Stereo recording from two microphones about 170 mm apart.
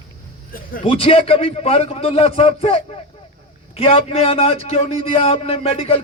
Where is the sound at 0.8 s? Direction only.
35° left (ahead or behind).